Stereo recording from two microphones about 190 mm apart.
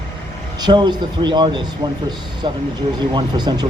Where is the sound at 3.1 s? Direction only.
20° right (ahead or behind).